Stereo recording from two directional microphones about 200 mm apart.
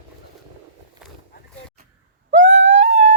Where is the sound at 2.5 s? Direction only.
65° right (ahead or behind).